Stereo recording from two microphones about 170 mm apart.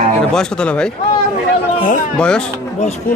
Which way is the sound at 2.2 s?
5° left (ahead or behind).